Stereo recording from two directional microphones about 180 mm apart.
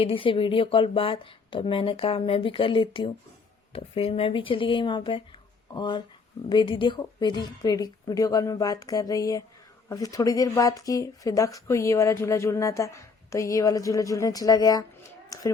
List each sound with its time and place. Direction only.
0.0 s speech: 30° left (ahead or behind)